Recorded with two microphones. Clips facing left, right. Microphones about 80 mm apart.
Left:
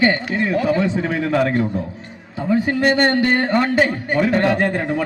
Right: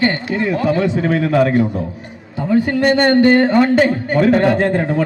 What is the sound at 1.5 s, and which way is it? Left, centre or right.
Speech, centre.